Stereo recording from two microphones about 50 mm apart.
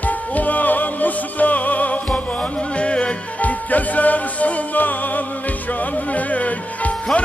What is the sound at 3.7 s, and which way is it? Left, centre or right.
Music, left.